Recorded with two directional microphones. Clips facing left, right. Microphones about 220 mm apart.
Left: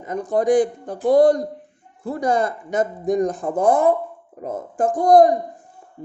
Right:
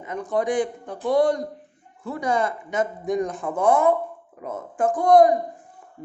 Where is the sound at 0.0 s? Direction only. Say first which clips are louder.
Left 4 dB; 40° left (ahead or behind).